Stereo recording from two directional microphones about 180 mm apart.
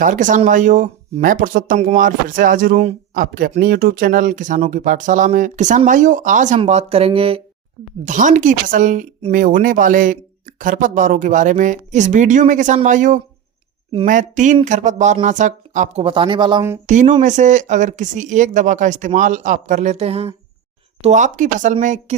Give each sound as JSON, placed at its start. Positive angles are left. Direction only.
{"t": 0.0, "sound": "speech", "side_deg": -45}
{"t": 8.0, "sound": "speech", "side_deg": -45}
{"t": 16.8, "sound": "speech", "side_deg": -45}